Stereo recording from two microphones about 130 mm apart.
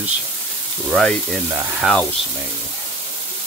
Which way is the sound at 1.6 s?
15° right (ahead or behind).